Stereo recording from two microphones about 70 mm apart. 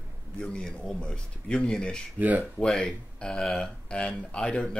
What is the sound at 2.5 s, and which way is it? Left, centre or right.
Speech, centre.